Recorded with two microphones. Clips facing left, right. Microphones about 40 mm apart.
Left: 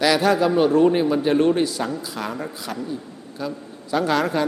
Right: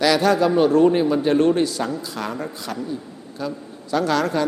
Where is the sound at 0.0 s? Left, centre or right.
Centre.